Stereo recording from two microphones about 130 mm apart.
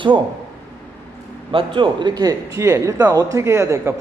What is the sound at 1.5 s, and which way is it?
A man's voice, 40° right (ahead or behind).